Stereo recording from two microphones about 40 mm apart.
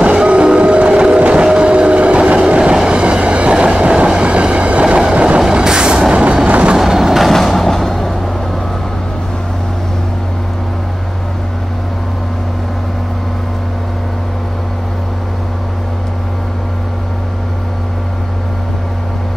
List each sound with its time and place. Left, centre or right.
0.0 s train: right
5.5 s vehicle: centre
6.8 s train: centre
7.3 s music: centre